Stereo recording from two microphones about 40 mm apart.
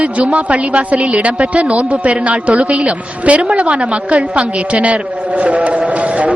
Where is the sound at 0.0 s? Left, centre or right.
Right.